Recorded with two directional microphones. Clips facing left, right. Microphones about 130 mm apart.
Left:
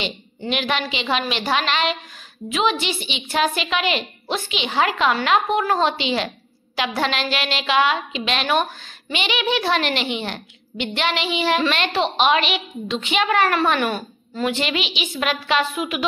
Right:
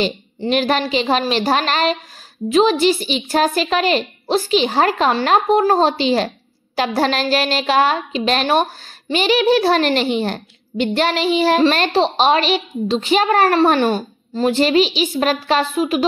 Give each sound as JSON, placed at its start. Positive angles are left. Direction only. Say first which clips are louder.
{"t": 0.0, "sound": "a child's voice", "louder": "right 8 dB", "side_deg": -40}